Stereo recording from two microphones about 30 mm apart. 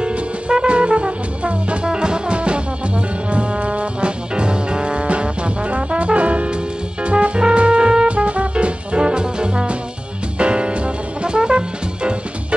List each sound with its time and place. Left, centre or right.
0.0 s music: right
1.9 s music: right
3.3 s trombone: right
8.1 s music: right
9.0 s trombone: right
10.3 s music: right